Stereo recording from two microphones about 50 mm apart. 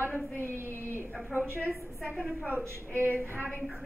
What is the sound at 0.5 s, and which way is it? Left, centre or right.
Speech, right.